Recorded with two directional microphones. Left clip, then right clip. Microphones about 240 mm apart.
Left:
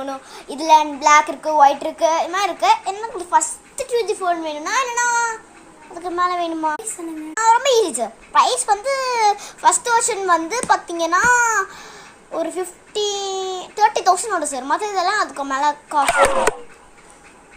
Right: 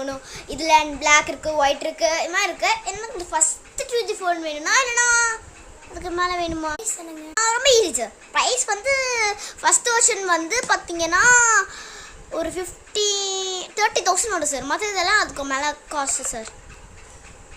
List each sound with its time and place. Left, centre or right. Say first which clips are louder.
0.0 s a child's voice: left 1 dB; centre